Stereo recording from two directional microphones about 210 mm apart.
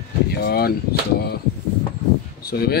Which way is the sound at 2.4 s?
50° left (ahead or behind).